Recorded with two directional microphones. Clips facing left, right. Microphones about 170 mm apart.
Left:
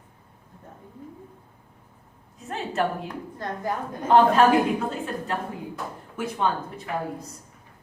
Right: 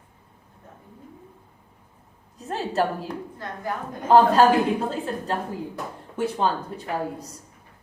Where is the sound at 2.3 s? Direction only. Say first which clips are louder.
Right 3 dB; 35° right (ahead or behind).